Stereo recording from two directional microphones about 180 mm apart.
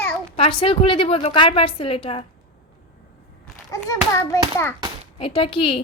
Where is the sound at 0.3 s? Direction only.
30° left (ahead or behind).